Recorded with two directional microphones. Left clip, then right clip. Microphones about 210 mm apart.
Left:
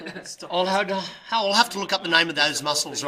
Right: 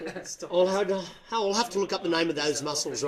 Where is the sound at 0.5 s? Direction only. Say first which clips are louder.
Left 2 dB; 35° left (ahead or behind).